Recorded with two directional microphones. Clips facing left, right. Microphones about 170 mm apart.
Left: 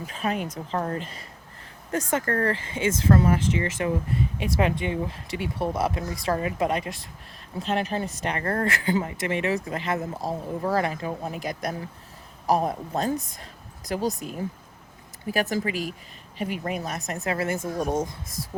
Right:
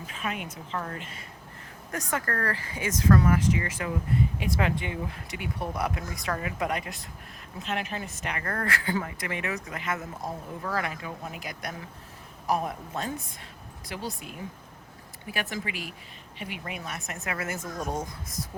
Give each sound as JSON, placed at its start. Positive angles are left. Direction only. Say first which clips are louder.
{"t": 0.1, "sound": "a woman's voice", "louder": "left 6 dB", "side_deg": 35}